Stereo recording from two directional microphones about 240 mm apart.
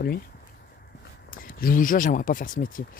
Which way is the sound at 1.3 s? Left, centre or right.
Left.